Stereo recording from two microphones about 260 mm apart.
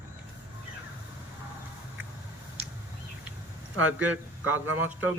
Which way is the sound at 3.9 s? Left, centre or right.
Centre.